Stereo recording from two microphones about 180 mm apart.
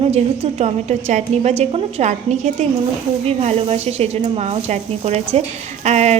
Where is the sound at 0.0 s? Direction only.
35° right (ahead or behind).